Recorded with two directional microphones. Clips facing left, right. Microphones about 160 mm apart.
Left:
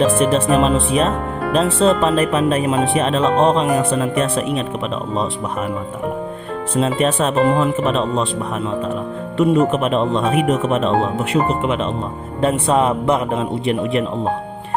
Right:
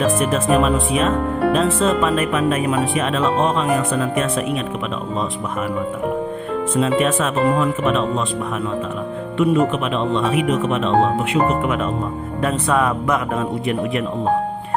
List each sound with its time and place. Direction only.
0.2 s speech: 30° left (ahead or behind)
6.7 s speech: 30° left (ahead or behind)
9.4 s speech: 40° left (ahead or behind)
11.6 s speech: 25° left (ahead or behind)